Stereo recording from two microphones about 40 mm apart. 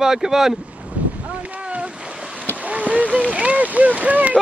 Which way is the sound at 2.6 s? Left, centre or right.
Right.